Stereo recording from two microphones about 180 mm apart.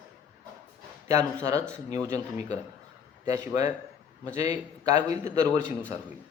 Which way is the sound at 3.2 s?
15° right (ahead or behind).